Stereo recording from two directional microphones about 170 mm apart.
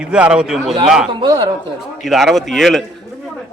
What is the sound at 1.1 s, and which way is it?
Speech, 30° right (ahead or behind).